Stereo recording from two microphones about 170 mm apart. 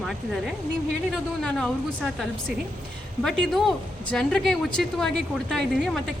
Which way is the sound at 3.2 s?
Centre (ahead or behind).